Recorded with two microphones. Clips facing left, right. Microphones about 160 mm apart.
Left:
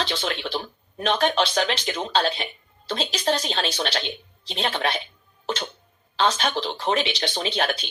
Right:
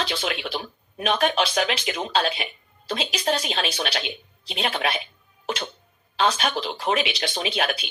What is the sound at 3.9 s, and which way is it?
Speech, 5° right (ahead or behind).